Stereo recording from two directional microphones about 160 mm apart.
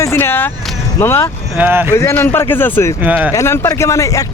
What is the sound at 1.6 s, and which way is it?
Speech, 15° right (ahead or behind).